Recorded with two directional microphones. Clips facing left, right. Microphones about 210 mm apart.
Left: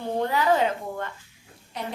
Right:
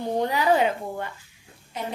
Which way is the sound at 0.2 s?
15° right (ahead or behind).